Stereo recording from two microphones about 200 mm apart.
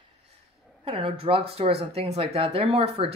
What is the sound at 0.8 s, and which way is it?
A woman's voice, 25° right (ahead or behind).